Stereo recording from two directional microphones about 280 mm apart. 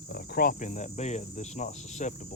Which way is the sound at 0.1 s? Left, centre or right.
Left.